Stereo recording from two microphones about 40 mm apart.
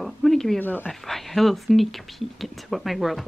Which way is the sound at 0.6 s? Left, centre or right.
Left.